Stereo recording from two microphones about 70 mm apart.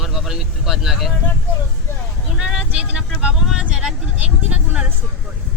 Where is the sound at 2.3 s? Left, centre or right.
Centre.